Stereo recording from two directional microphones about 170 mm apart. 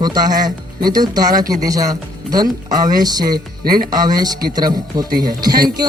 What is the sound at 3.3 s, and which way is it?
Speech, 60° right (ahead or behind).